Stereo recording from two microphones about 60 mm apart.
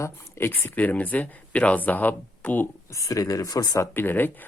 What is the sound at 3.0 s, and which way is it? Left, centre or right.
Speech, left.